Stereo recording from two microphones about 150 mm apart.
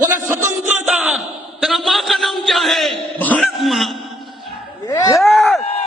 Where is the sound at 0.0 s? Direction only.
15° right (ahead or behind).